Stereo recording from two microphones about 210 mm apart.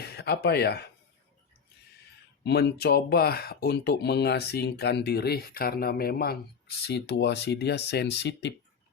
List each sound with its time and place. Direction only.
0.0 s speech: 50° left (ahead or behind)
2.4 s speech: 55° left (ahead or behind)